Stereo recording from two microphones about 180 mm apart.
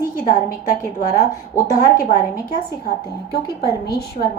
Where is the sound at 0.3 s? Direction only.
45° left (ahead or behind).